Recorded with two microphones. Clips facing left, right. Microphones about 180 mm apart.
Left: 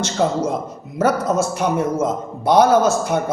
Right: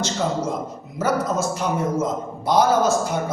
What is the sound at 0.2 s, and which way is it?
A man's voice, 60° left (ahead or behind).